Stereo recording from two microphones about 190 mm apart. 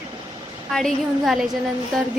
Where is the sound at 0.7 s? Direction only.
Centre (ahead or behind).